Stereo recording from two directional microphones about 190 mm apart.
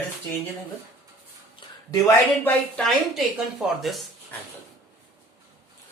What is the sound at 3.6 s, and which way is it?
Speech, 5° right (ahead or behind).